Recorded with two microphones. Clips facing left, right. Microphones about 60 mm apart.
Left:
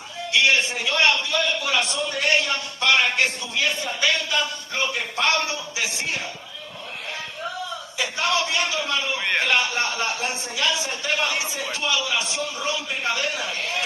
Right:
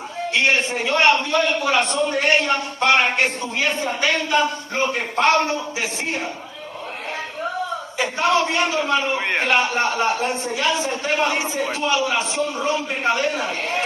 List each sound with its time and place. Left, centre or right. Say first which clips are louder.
0.3 s a man's voice: right 1 dB; right
7.4 s a sound: right 6 dB; right
9.4 s a man's voice: right 5 dB; right